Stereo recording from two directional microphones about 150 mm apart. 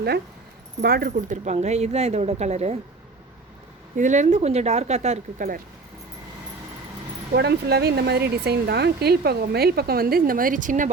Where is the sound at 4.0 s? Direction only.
55° right (ahead or behind).